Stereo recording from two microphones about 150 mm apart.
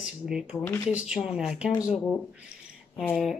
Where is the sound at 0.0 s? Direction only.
5° right (ahead or behind).